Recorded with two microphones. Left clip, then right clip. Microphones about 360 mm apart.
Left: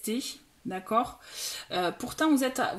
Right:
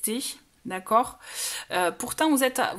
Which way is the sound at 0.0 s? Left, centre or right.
Right.